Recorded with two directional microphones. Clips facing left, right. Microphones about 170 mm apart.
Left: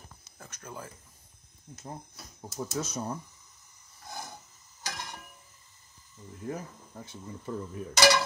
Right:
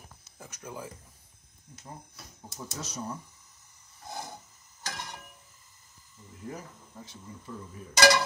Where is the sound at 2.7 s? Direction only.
50° left (ahead or behind).